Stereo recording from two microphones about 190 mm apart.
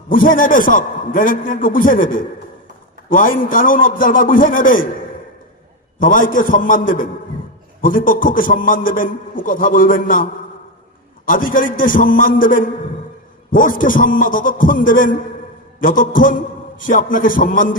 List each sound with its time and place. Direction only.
0.1 s a man's voice: 45° left (ahead or behind)
6.0 s a man's voice: 45° left (ahead or behind)
11.3 s a man's voice: 45° left (ahead or behind)